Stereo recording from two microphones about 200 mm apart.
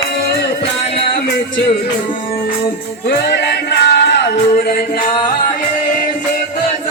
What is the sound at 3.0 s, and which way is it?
Music, 55° left (ahead or behind).